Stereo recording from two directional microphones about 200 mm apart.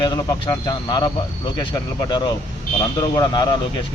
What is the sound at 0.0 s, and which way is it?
A man's voice, 20° left (ahead or behind).